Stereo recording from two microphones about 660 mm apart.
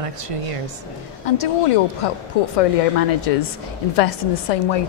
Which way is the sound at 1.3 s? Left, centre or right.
Left.